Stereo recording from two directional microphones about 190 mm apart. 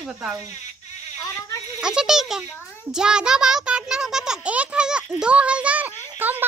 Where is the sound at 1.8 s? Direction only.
5° right (ahead or behind).